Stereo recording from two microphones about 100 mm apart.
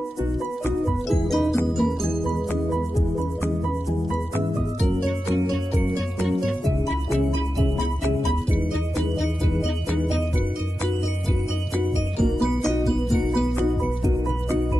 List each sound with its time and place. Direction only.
1.0 s music: centre (ahead or behind)
5.5 s music: centre (ahead or behind)
12.2 s music: centre (ahead or behind)